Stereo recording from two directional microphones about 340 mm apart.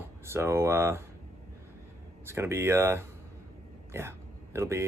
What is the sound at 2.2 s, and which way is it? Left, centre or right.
Speech, centre.